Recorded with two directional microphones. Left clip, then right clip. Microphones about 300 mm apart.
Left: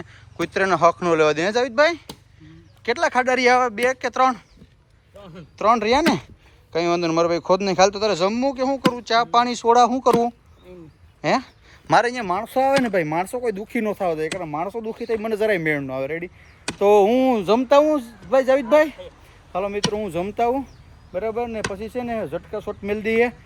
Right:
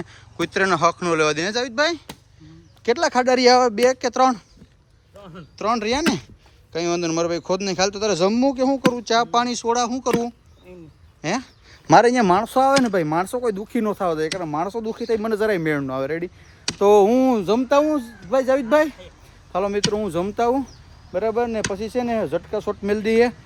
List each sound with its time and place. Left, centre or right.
0.0 s speech: centre
5.2 s speech: centre
11.2 s speech: centre; by 12.5 s right
12.8 s speech: centre